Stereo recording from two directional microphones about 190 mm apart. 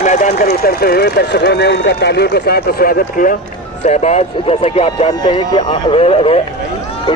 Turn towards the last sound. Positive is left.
turn(degrees=30)  # may be behind; listen again after turning